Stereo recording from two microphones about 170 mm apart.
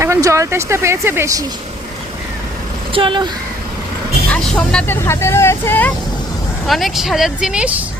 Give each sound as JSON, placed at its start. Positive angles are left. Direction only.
{"t": 0.0, "sound": "speech", "side_deg": -15}
{"t": 2.9, "sound": "speech", "side_deg": -30}
{"t": 4.3, "sound": "speech", "side_deg": 5}
{"t": 6.7, "sound": "speech", "side_deg": 0}